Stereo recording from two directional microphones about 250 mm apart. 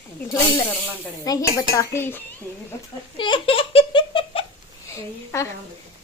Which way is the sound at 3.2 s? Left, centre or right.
Left.